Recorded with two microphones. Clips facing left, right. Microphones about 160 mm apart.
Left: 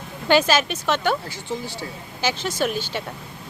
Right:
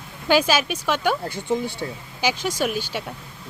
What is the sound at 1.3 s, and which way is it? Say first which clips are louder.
Speech: right 6 dB; 55° right (ahead or behind).